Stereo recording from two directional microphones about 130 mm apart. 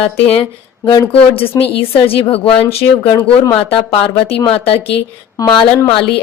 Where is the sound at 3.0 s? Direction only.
25° left (ahead or behind).